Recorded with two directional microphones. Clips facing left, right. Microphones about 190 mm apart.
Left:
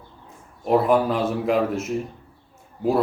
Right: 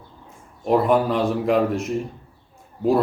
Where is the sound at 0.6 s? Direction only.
Centre (ahead or behind).